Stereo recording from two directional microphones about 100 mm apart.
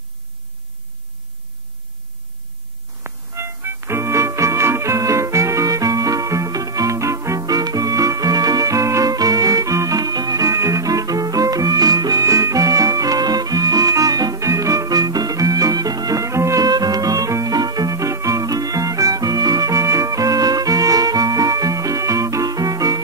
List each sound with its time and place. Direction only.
3.0 s music: 25° right (ahead or behind)